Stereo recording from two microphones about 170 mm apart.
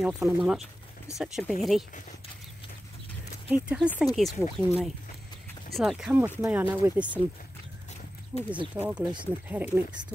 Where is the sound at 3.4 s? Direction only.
5° right (ahead or behind).